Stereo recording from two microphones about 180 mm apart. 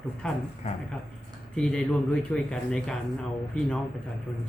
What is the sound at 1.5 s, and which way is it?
Speech, 5° left (ahead or behind).